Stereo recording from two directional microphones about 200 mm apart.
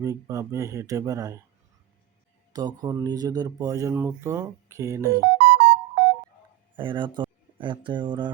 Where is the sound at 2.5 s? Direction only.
20° right (ahead or behind).